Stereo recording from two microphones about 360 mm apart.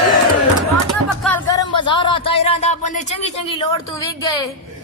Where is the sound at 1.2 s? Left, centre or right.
Centre.